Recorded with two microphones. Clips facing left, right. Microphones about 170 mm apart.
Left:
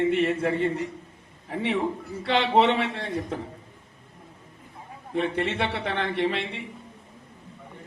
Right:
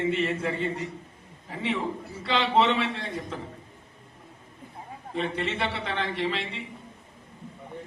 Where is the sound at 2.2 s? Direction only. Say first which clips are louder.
Left 3 dB; 60° left (ahead or behind).